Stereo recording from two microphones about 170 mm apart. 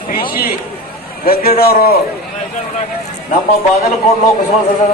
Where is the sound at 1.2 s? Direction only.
60° left (ahead or behind).